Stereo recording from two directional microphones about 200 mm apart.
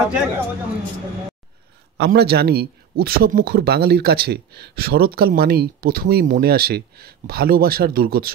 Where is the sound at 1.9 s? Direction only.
55° right (ahead or behind).